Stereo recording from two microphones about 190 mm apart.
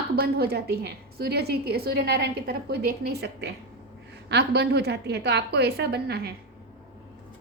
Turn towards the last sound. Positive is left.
turn(degrees=-60)  # may be behind; listen again after turning